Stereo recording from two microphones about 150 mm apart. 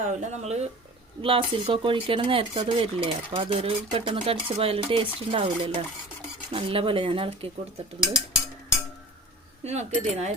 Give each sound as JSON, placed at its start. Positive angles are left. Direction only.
{"t": 0.1, "sound": "speech", "side_deg": -50}
{"t": 1.2, "sound": "speech", "side_deg": -35}
{"t": 9.6, "sound": "speech", "side_deg": -50}